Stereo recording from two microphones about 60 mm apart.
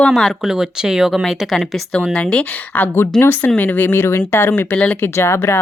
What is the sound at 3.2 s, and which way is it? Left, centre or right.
Speech, left.